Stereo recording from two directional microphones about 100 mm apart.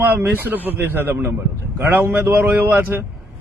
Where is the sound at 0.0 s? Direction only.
20° right (ahead or behind).